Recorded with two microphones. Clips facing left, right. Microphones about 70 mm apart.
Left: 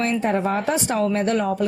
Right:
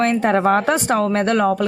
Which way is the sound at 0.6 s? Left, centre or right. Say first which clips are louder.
Right 4 dB; right.